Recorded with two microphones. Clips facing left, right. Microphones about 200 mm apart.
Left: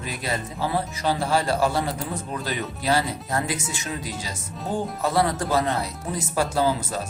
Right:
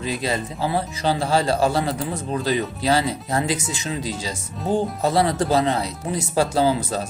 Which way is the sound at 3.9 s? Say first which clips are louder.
Right 6 dB; 25° right (ahead or behind).